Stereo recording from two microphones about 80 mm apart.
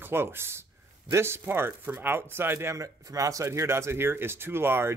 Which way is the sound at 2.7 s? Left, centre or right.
Right.